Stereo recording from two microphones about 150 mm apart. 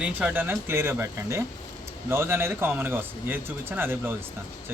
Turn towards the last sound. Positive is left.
turn(degrees=-15)  # may be behind; listen again after turning